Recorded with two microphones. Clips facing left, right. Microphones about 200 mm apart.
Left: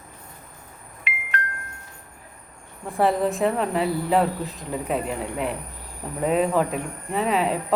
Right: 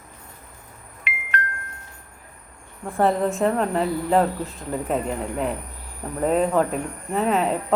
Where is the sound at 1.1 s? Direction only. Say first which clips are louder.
Even; 55° right (ahead or behind).